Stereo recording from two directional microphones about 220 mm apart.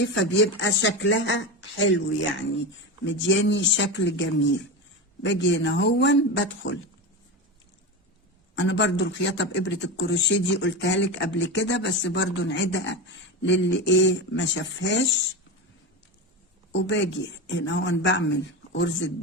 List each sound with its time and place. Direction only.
0.0 s speech: 55° left (ahead or behind)
8.5 s speech: 55° left (ahead or behind)
16.7 s speech: 55° left (ahead or behind)